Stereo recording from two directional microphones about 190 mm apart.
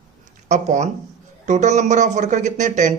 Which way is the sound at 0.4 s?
40° right (ahead or behind).